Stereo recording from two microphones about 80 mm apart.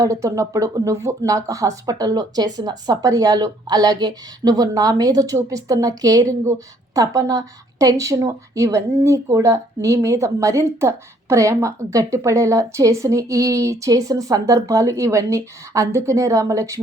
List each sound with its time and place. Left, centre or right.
0.0 s speech: right